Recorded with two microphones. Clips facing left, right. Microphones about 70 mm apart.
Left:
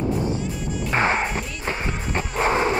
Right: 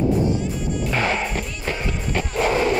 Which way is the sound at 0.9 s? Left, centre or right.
Left.